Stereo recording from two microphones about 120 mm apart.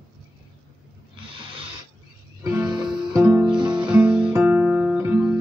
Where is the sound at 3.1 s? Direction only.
20° right (ahead or behind).